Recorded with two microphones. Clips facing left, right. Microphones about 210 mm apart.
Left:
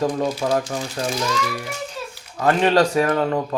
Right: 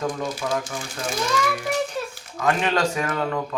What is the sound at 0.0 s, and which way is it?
Speech, 35° left (ahead or behind).